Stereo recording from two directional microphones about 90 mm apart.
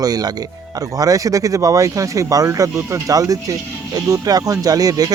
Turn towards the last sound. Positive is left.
turn(degrees=-45)  # may be behind; listen again after turning